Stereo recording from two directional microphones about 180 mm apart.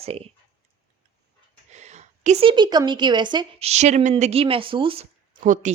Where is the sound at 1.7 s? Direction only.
40° right (ahead or behind).